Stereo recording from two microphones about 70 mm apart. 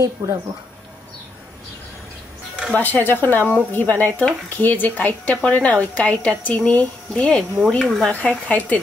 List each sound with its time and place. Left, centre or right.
0.2 s speech: right
2.7 s a woman's voice: left
7.8 s speech: centre
8.1 s a woman's voice: left